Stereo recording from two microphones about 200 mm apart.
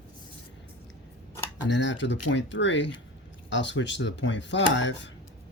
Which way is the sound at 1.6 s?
65° left (ahead or behind).